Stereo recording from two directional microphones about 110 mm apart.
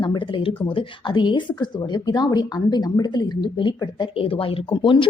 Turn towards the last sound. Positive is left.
turn(degrees=45)  # may be behind; listen again after turning